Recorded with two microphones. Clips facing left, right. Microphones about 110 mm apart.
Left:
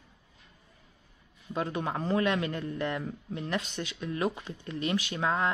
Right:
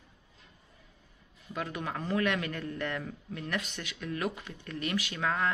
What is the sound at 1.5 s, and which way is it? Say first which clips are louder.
Speech: left 4 dB; 30° left (ahead or behind).